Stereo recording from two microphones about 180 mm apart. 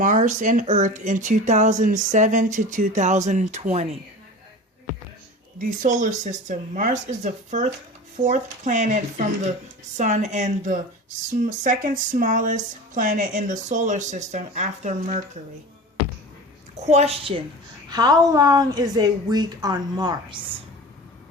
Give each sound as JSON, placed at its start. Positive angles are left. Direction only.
{"t": 0.0, "sound": "speech", "side_deg": -45}
{"t": 5.5, "sound": "speech", "side_deg": -45}
{"t": 16.8, "sound": "a woman's voice", "side_deg": -35}